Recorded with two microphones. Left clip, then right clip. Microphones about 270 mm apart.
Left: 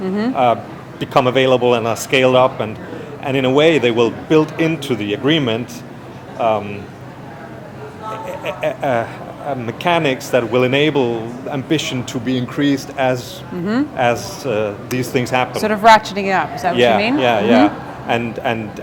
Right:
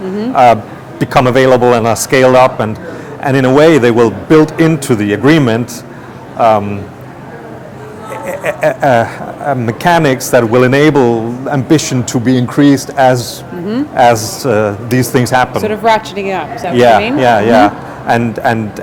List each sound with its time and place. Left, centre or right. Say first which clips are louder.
0.3 s a man's voice: right 10 dB; right
8.3 s a sound: right 9 dB; right
9.0 s speech: right 8 dB; right
15.5 s speech: even; left
16.7 s a man's voice: right 7 dB; right